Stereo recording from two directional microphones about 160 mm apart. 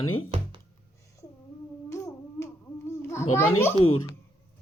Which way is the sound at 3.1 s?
15° left (ahead or behind).